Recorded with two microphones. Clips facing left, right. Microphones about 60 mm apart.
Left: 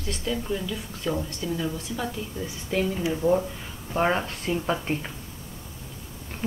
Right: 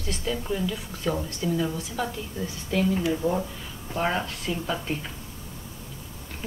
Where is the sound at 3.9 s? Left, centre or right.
Left.